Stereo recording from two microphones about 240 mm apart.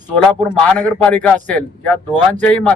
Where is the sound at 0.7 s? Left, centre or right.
Centre.